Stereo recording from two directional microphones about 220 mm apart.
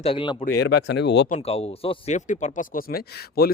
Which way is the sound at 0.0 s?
25° left (ahead or behind).